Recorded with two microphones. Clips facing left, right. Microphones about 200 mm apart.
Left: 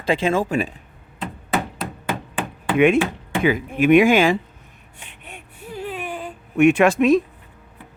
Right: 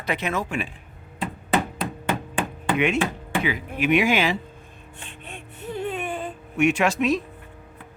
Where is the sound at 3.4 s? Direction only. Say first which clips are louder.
Left 9 dB; 50° left (ahead or behind).